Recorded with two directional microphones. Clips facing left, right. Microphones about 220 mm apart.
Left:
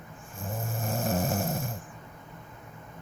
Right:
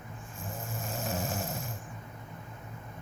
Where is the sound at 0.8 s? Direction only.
50° left (ahead or behind).